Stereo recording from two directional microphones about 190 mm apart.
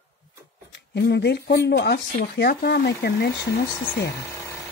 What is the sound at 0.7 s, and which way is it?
Speech, 65° left (ahead or behind).